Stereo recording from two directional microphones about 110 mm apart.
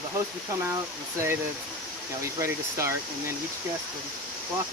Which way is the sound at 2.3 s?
25° right (ahead or behind).